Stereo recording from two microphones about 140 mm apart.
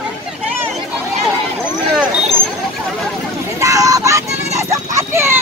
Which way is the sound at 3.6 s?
25° right (ahead or behind).